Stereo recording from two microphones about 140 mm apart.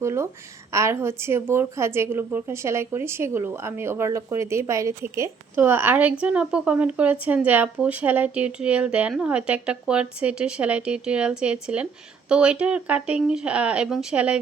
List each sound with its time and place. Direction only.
0.0 s a woman's voice: 20° right (ahead or behind)